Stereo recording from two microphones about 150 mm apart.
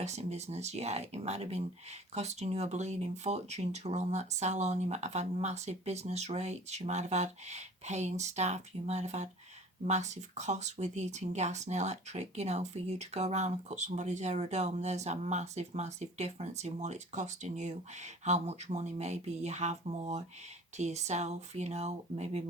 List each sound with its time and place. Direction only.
0.0 s speech: 50° right (ahead or behind)